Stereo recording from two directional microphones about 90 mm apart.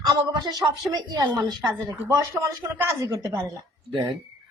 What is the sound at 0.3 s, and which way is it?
Speech, 50° right (ahead or behind).